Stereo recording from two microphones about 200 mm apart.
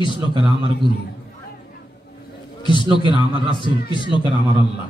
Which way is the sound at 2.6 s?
25° left (ahead or behind).